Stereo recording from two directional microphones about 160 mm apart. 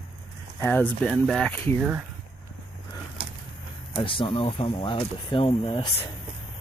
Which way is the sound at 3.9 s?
35° left (ahead or behind).